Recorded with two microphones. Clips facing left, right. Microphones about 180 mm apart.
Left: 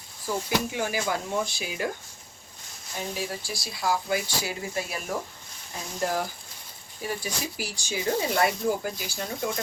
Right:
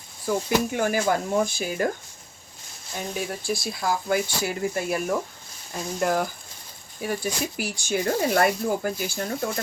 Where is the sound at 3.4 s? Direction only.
55° right (ahead or behind).